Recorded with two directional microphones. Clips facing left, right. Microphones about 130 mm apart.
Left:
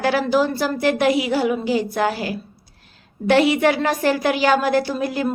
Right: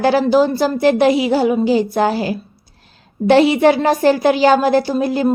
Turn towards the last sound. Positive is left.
turn(degrees=-30)  # may be behind; listen again after turning